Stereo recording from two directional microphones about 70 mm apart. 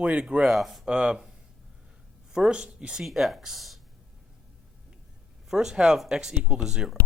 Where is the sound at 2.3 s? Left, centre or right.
Centre.